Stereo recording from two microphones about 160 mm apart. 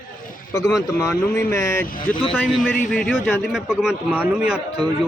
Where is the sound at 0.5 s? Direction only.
20° left (ahead or behind).